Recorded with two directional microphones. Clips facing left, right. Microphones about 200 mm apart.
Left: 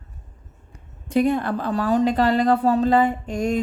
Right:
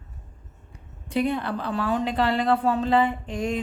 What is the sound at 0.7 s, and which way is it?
Speech, 45° left (ahead or behind).